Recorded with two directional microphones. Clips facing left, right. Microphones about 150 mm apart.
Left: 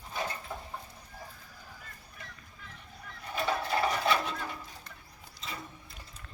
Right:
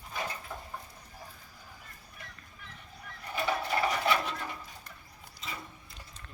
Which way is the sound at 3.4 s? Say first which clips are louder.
Even; centre (ahead or behind).